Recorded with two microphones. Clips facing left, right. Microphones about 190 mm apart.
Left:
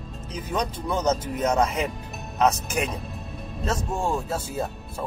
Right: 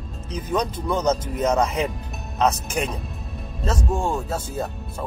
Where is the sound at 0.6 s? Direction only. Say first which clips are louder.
Right 1 dB; 5° left (ahead or behind).